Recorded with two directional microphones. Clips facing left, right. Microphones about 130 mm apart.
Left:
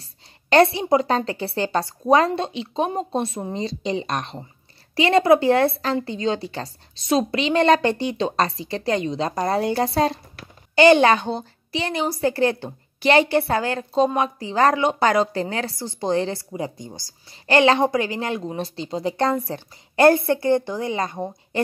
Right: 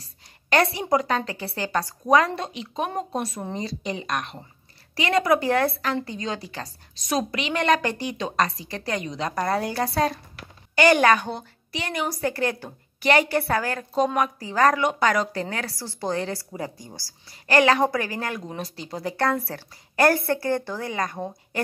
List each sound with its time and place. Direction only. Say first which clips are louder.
0.0 s a woman's voice: left 1 dB; 25° left (ahead or behind)